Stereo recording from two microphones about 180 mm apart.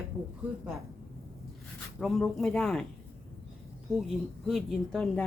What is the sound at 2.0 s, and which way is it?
Speech, centre (ahead or behind).